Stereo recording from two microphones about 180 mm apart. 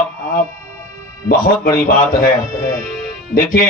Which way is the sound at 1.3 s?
50° left (ahead or behind).